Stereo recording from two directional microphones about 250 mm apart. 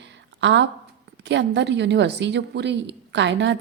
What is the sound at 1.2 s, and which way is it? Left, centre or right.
A woman's voice, right.